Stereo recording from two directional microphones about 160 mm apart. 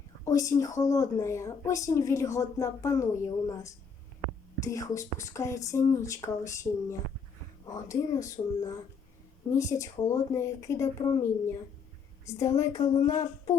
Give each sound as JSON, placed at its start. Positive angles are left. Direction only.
{"t": 0.3, "sound": "a woman's voice", "side_deg": 20}
{"t": 12.3, "sound": "a woman's voice", "side_deg": 20}